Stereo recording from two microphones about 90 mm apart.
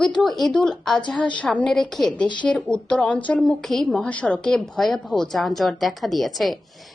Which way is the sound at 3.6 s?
5° left (ahead or behind).